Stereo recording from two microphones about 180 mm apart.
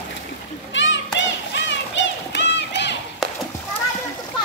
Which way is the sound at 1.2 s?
90° left.